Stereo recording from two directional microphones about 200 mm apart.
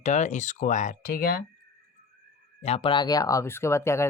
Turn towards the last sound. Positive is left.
turn(degrees=15)  # may be behind; listen again after turning